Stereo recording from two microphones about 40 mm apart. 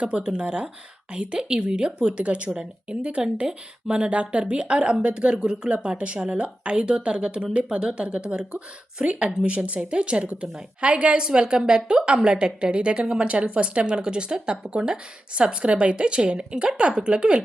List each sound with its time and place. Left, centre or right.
0.0 s a woman's voice: right
2.1 s a woman's voice: right